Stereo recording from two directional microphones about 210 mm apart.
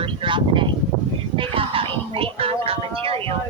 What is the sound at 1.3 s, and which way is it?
Music, 25° right (ahead or behind).